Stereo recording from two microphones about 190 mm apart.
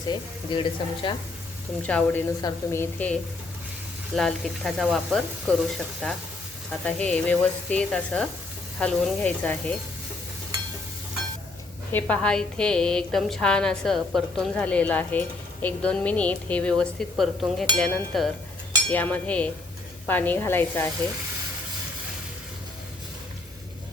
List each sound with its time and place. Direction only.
0.1 s speech: 25° left (ahead or behind)
1.9 s a woman's voice: 5° left (ahead or behind)
11.9 s a woman's voice: 10° left (ahead or behind)